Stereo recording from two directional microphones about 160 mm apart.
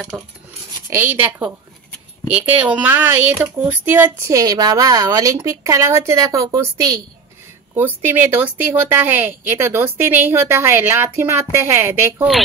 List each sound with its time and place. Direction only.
0.8 s a woman's voice: 15° right (ahead or behind)
7.7 s a woman's voice: 10° right (ahead or behind)